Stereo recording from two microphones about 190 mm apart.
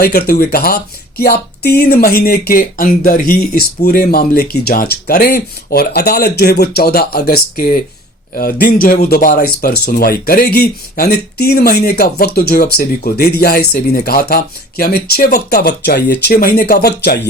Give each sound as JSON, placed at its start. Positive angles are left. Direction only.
{"t": 0.0, "sound": "speech", "side_deg": 55}